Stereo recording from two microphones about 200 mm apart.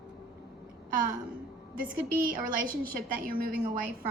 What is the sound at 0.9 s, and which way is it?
A woman's voice, 45° right (ahead or behind).